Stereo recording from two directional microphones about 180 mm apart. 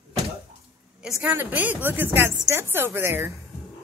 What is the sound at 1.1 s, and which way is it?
Speech, 10° right (ahead or behind).